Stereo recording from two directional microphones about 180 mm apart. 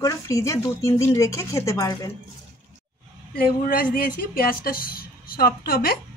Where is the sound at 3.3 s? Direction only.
50° left (ahead or behind).